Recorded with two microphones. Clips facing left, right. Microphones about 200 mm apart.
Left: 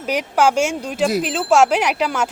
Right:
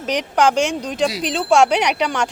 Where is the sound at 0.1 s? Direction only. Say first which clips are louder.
Even; 5° left (ahead or behind).